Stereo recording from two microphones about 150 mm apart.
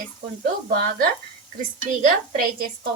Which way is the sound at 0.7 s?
80° right.